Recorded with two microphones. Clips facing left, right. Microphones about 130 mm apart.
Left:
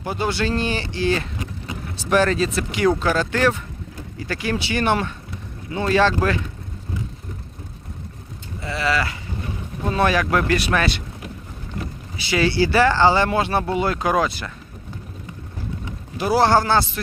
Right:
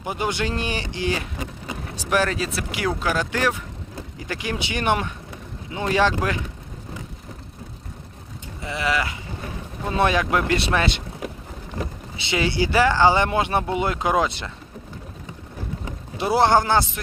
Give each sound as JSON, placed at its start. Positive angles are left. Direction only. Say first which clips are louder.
{"t": 0.0, "sound": "speech", "louder": "left 2 dB", "side_deg": -15}
{"t": 8.6, "sound": "speech", "louder": "left 2 dB", "side_deg": -20}
{"t": 12.1, "sound": "speech", "louder": "left 4 dB", "side_deg": -20}
{"t": 16.1, "sound": "speech", "louder": "left 1 dB", "side_deg": -25}